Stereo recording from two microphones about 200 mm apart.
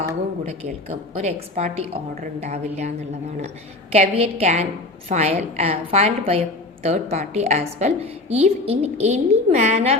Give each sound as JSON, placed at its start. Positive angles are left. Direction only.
{"t": 1.1, "sound": "a woman's voice", "side_deg": -35}
{"t": 3.9, "sound": "a woman's voice", "side_deg": -35}